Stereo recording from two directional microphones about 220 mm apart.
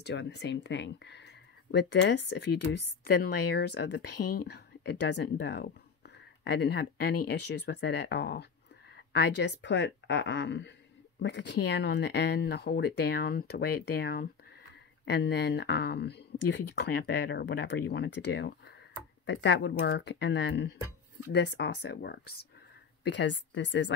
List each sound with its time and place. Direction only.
0.0 s speech: 50° left (ahead or behind)
8.9 s a sound: 45° left (ahead or behind)
9.4 s speech: 50° left (ahead or behind)